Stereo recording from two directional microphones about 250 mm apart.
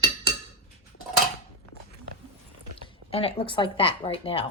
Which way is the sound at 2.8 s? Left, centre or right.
Left.